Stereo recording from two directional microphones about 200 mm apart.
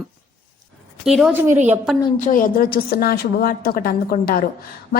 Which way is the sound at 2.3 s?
45° left (ahead or behind).